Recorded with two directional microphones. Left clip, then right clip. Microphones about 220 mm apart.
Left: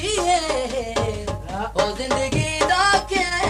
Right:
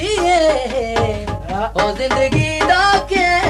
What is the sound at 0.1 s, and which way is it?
Music, 15° right (ahead or behind).